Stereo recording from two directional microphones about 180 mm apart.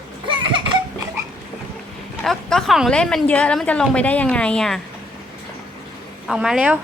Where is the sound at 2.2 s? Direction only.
Centre (ahead or behind).